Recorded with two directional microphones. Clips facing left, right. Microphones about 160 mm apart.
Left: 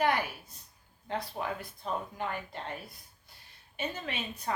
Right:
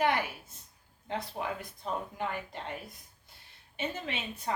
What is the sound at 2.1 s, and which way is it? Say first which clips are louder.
Speech: even; 20° right (ahead or behind).